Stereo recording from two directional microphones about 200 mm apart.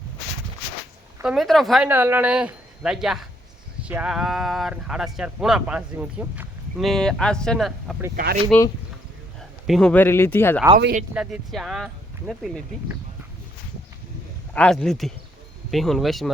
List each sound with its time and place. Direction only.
1.2 s speech: centre (ahead or behind)
8.1 s speech: 50° right (ahead or behind)
9.4 s speech: centre (ahead or behind)
11.1 s speech: 5° right (ahead or behind)
14.5 s speech: 5° left (ahead or behind)